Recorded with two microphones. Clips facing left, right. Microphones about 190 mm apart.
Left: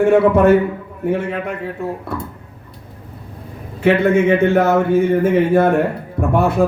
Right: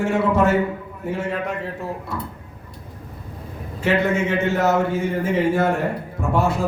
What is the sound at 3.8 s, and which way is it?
A man's voice, 60° left (ahead or behind).